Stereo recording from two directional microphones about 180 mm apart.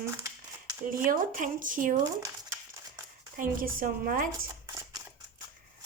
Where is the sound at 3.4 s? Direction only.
50° right (ahead or behind).